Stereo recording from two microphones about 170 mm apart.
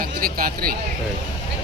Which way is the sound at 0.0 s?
60° right (ahead or behind).